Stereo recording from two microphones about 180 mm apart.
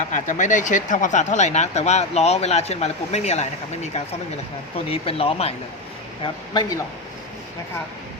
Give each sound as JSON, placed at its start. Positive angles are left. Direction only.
{"t": 0.1, "sound": "speech", "side_deg": 45}
{"t": 4.9, "sound": "speech", "side_deg": 30}